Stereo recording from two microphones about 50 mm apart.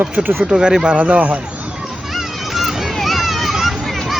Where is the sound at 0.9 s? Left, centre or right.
Right.